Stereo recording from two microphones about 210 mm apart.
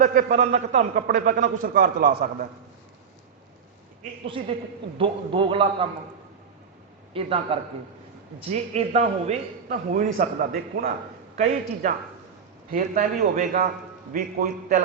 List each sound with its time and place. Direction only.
0.0 s a man's voice: 40° right (ahead or behind)
4.9 s speech: 25° right (ahead or behind)
7.1 s speech: 25° right (ahead or behind)
9.6 s a man's voice: 45° right (ahead or behind)